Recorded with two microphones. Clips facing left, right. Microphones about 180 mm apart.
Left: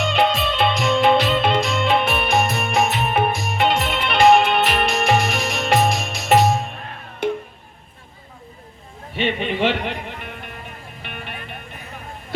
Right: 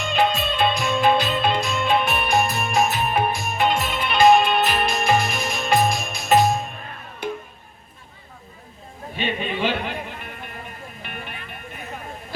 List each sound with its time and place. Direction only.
0.0 s music: 65° left (ahead or behind)
9.1 s a sound: 70° left (ahead or behind)
9.6 s music: 70° left (ahead or behind)